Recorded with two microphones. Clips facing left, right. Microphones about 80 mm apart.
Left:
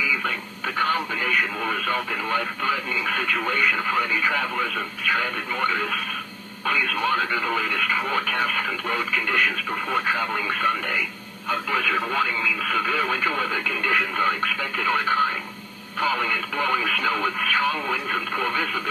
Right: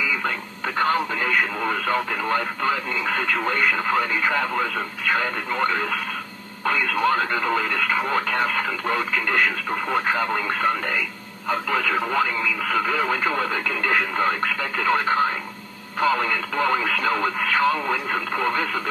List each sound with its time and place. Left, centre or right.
0.8 s radio: right
1.7 s speech: right
13.5 s speech: right